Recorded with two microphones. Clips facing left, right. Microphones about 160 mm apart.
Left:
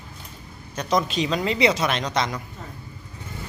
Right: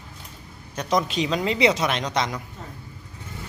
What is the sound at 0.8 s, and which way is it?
Speech, 15° right (ahead or behind).